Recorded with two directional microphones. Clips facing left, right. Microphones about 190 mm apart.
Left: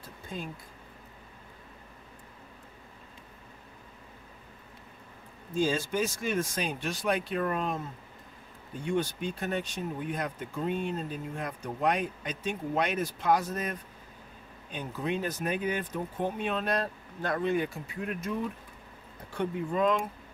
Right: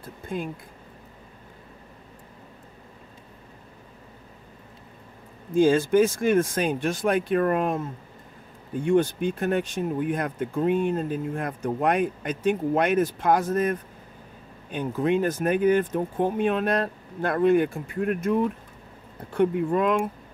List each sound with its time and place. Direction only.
0.0 s speech: 55° right (ahead or behind)
5.6 s speech: 55° right (ahead or behind)
8.8 s speech: 55° right (ahead or behind)